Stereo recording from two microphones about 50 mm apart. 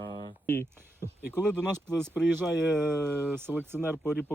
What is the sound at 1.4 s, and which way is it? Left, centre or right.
Speech, centre.